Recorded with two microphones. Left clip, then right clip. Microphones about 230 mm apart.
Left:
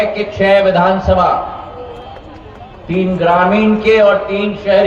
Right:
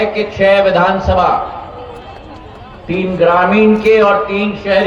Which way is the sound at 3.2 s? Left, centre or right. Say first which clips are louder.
Right 2 dB; right.